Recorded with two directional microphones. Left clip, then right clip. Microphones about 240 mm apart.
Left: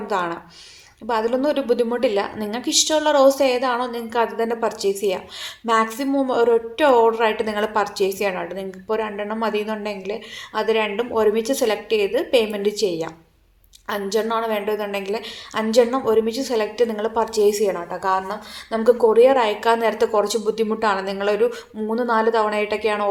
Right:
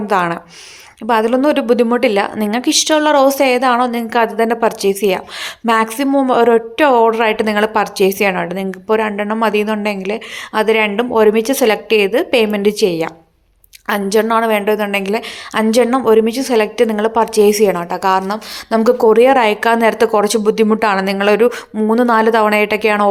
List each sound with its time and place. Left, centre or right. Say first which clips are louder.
0.1 s a woman's voice: right 8 dB; right